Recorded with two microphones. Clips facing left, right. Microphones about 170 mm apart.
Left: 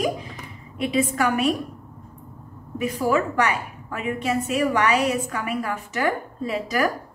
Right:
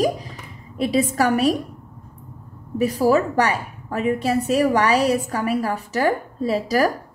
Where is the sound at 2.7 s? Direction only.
35° right (ahead or behind).